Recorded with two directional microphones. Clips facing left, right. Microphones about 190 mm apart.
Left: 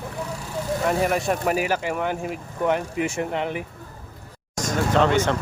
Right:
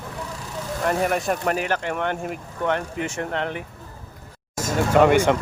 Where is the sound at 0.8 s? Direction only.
Centre (ahead or behind).